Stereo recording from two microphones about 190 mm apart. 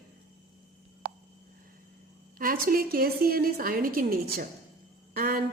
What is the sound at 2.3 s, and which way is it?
A woman's voice, 50° right (ahead or behind).